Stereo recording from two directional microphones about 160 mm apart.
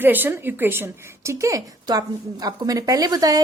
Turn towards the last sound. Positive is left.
turn(degrees=-25)  # may be behind; listen again after turning